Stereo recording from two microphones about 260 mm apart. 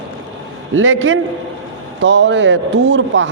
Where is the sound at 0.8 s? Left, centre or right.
Right.